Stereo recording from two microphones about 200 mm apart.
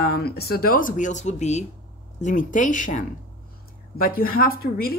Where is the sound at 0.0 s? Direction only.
50° left (ahead or behind).